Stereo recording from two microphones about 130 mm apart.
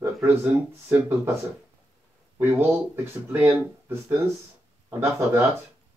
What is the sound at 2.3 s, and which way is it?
Speech, 20° right (ahead or behind).